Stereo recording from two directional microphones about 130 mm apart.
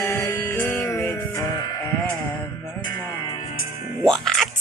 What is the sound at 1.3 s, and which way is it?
Music, 30° left (ahead or behind).